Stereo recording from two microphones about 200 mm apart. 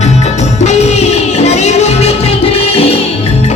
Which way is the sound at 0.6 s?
35° left (ahead or behind).